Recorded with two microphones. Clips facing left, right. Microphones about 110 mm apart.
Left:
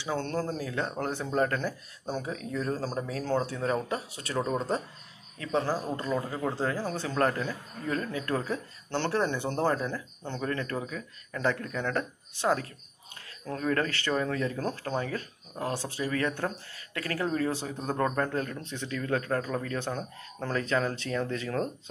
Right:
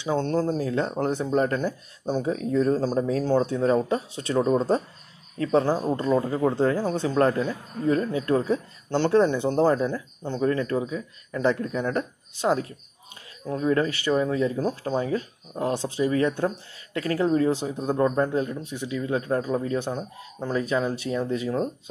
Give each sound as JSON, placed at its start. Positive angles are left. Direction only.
{"t": 0.0, "sound": "speech", "side_deg": -20}
{"t": 2.3, "sound": "speech", "side_deg": -30}
{"t": 2.8, "sound": "speech", "side_deg": -20}